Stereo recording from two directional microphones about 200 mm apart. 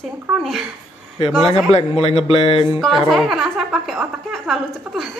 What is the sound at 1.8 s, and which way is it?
Speech, 30° left (ahead or behind).